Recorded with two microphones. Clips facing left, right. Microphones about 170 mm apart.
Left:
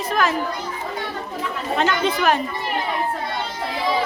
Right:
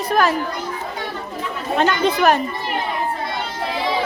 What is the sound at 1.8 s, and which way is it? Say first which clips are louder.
Speech: right 4 dB; 40° right (ahead or behind).